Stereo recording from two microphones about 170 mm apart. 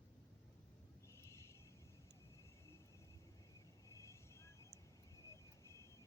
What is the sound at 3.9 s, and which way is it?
Vehicle, 15° left (ahead or behind).